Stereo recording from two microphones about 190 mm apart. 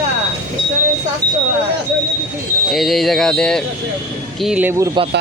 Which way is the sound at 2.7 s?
Centre (ahead or behind).